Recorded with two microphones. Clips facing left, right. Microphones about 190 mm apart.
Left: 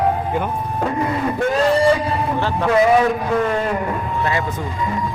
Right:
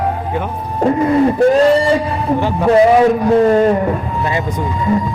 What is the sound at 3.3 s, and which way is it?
Speech, 35° right (ahead or behind).